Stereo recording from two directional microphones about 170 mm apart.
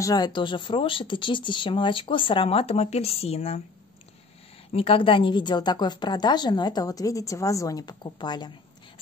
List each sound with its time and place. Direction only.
0.0 s a woman's voice: 25° left (ahead or behind)
4.7 s a woman's voice: 30° left (ahead or behind)